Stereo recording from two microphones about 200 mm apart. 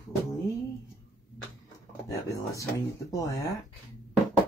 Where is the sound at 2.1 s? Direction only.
15° left (ahead or behind).